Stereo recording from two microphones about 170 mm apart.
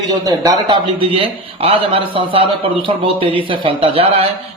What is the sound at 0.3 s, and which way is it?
A man's voice, 20° right (ahead or behind).